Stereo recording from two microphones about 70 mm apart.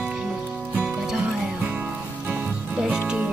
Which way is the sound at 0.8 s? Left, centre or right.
Centre.